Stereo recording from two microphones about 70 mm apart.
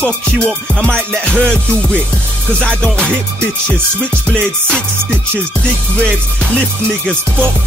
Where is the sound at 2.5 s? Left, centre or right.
Centre.